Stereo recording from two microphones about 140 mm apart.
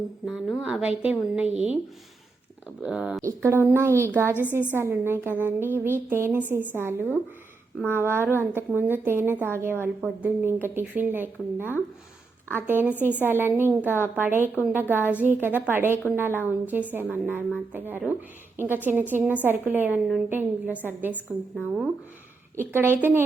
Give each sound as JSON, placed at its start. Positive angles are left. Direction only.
{"t": 0.3, "sound": "a woman's voice", "side_deg": -5}
{"t": 2.8, "sound": "a woman's voice", "side_deg": -5}
{"t": 3.2, "sound": "a woman's voice", "side_deg": -20}
{"t": 22.5, "sound": "a woman's voice", "side_deg": -15}